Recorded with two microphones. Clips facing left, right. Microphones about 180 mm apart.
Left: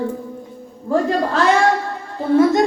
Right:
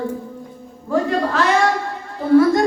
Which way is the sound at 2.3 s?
20° left (ahead or behind).